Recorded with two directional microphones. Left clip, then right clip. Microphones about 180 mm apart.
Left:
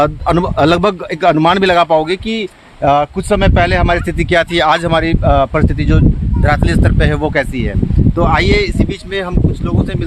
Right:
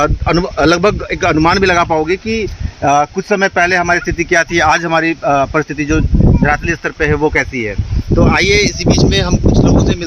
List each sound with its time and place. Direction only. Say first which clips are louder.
0.0 s a man's voice: left 1 dB; 90° left; by 2.3 s 60° left (ahead or behind)
2.8 s speech: even; 45° left (ahead or behind)
6.4 s speech: left 2 dB; 55° left (ahead or behind)
8.2 s speech: right 2 dB; 90° left; by 9.2 s 55° left (ahead or behind)